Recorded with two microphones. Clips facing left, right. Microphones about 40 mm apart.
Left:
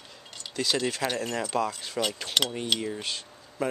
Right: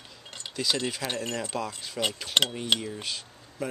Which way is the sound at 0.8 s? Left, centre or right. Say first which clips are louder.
Left 3 dB; centre.